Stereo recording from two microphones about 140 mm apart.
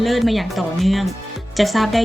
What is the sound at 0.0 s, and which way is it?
A woman's voice, centre (ahead or behind).